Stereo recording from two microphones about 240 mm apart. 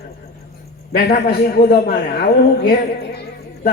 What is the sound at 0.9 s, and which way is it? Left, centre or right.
A man's voice, left.